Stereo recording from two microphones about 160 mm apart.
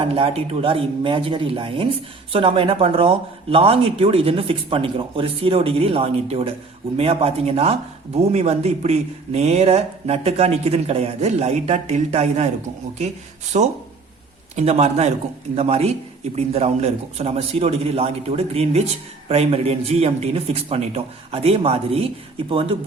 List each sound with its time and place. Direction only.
0.0 s speech: 35° right (ahead or behind)
13.5 s a man's voice: 45° right (ahead or behind)